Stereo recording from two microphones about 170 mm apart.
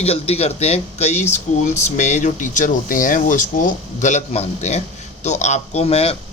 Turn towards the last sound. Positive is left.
turn(degrees=35)  # may be behind; listen again after turning